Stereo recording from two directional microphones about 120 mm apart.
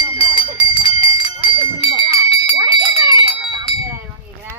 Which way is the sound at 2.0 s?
55° left (ahead or behind).